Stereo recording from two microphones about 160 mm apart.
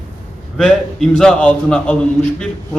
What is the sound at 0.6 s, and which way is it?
A man's voice, 5° left (ahead or behind).